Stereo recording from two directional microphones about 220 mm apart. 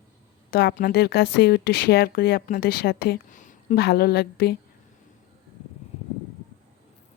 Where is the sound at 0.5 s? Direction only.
40° left (ahead or behind).